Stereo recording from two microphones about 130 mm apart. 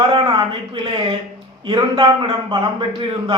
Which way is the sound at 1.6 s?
35° right (ahead or behind).